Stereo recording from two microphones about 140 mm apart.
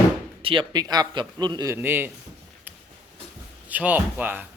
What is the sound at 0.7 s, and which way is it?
A man's voice, 30° right (ahead or behind).